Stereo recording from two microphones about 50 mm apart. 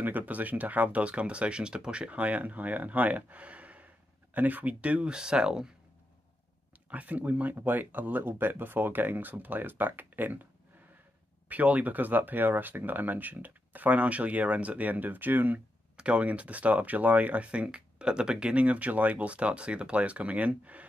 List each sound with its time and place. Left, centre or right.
0.0 s speech: right; by 5.7 s centre
6.9 s speech: right
16.0 s speech: right